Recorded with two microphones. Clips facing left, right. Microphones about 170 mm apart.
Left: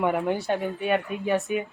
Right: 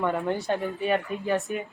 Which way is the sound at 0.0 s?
15° left (ahead or behind).